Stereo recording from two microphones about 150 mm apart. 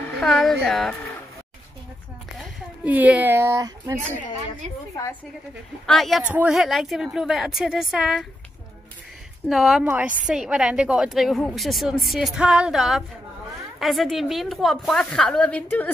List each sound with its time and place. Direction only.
0.2 s a woman's voice: 5° left (ahead or behind)
2.3 s a woman's voice: 10° right (ahead or behind)
5.9 s a woman's voice: centre (ahead or behind)
9.5 s a woman's voice: centre (ahead or behind)